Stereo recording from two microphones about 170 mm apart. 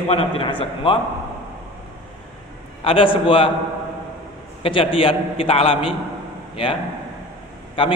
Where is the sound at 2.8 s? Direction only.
30° left (ahead or behind).